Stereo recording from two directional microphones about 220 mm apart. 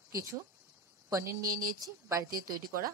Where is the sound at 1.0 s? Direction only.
15° right (ahead or behind).